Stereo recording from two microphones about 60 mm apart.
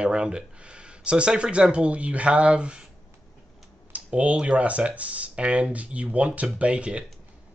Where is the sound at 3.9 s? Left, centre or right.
Right.